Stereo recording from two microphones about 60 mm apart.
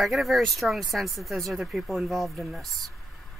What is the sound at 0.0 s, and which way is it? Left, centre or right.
Speech, centre.